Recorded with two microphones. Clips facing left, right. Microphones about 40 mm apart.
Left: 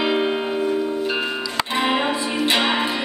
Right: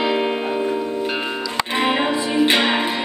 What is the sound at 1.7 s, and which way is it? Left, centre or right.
Music, right.